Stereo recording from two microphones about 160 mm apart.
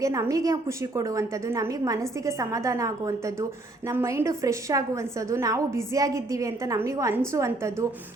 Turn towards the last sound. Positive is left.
turn(degrees=-15)  # may be behind; listen again after turning